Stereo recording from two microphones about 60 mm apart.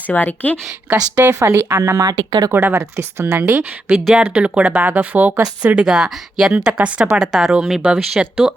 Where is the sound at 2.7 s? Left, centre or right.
Right.